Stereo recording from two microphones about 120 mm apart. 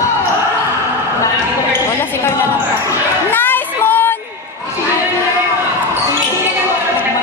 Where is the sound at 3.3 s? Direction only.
15° left (ahead or behind).